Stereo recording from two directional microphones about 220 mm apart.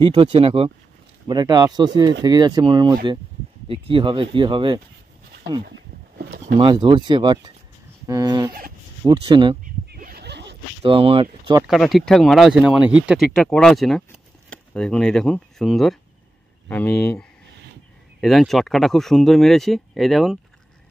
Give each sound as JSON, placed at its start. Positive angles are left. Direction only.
{"t": 0.0, "sound": "speech", "side_deg": -20}
{"t": 6.6, "sound": "speech", "side_deg": -20}
{"t": 9.8, "sound": "a sound", "side_deg": -45}
{"t": 10.8, "sound": "speech", "side_deg": -25}
{"t": 11.6, "sound": "speech", "side_deg": 0}